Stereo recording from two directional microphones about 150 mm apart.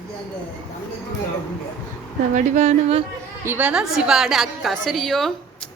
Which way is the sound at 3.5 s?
10° right (ahead or behind).